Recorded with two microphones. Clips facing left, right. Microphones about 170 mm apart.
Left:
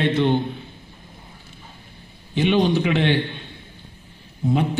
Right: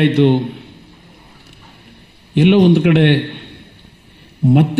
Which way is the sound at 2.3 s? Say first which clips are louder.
Right 8 dB; 70° right (ahead or behind).